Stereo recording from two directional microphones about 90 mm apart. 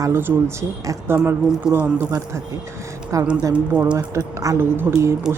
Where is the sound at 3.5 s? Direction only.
10° right (ahead or behind).